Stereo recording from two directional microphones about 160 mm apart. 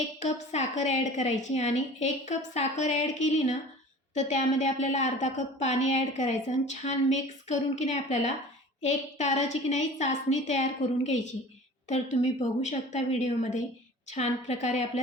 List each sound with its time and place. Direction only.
0.2 s a woman's voice: 45° left (ahead or behind)